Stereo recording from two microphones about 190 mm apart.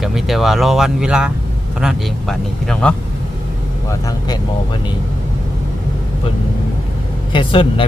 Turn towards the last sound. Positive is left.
turn(degrees=25)  # may be behind; listen again after turning